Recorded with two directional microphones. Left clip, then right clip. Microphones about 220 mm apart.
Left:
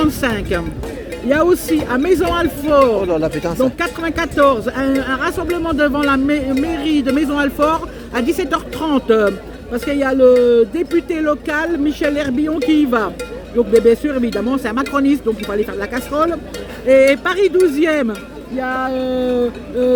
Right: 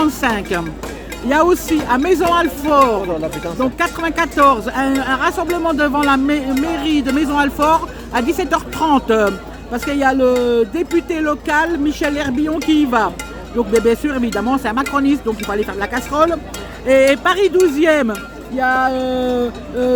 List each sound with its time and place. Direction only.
0.0 s speech: 5° right (ahead or behind)
3.1 s speech: 35° left (ahead or behind)
3.6 s speech: 5° right (ahead or behind)